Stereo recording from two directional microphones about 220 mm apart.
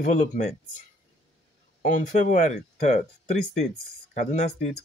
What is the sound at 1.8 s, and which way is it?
Speech, 35° left (ahead or behind).